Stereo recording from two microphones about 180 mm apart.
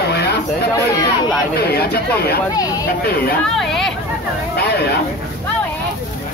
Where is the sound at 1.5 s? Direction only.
60° left (ahead or behind).